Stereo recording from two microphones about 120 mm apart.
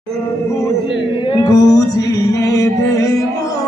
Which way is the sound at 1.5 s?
30° left (ahead or behind).